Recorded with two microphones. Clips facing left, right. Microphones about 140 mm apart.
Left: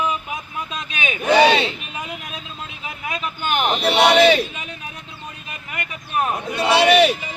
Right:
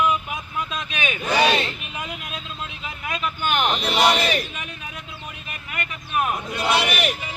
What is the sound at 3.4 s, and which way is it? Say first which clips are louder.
Speech: left 3 dB; 5° left (ahead or behind).